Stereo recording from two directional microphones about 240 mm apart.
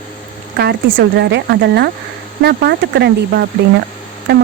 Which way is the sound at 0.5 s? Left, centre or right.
Right.